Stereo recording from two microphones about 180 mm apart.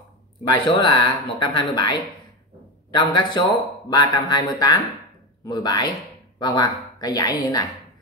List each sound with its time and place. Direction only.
0.5 s speech: 25° left (ahead or behind)